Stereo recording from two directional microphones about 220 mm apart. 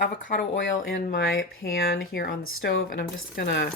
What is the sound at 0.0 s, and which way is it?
Speech, 40° left (ahead or behind).